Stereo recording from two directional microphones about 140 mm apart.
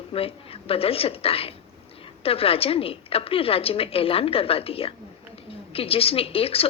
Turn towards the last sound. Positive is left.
turn(degrees=45)  # may be behind; listen again after turning